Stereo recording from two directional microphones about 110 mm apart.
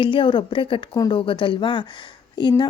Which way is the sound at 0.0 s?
50° left (ahead or behind).